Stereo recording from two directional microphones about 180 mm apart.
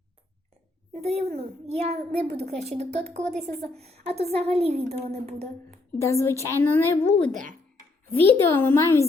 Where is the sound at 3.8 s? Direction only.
35° right (ahead or behind).